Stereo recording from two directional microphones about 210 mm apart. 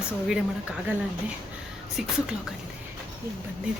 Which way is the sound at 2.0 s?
Centre (ahead or behind).